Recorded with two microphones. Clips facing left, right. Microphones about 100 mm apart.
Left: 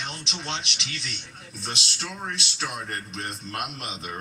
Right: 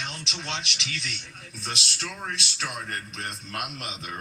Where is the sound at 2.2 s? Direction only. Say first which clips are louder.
Left 2 dB; 25° left (ahead or behind).